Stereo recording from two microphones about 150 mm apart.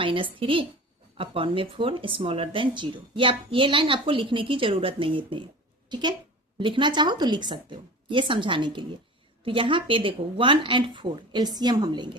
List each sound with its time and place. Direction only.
0.0 s a woman's voice: 35° right (ahead or behind)